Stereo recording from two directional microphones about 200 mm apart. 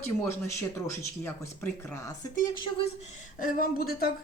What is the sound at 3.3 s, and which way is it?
Speech, 40° left (ahead or behind).